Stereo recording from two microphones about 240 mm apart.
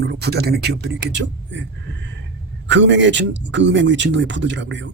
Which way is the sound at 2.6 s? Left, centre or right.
Right.